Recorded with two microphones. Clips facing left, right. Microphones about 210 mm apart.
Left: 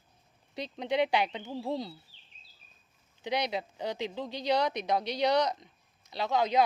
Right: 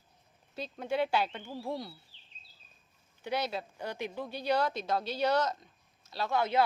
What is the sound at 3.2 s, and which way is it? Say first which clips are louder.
Speech: left 2 dB; 15° left (ahead or behind).